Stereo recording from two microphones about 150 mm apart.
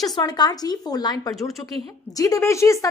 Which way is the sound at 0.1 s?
30° left (ahead or behind).